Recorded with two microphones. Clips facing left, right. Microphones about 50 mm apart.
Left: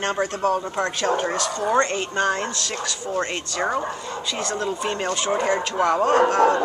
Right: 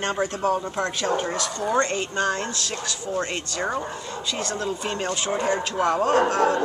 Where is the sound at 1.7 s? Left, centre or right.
Centre.